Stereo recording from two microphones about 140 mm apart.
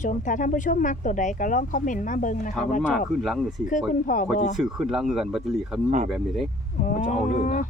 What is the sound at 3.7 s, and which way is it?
Speech, 70° left (ahead or behind).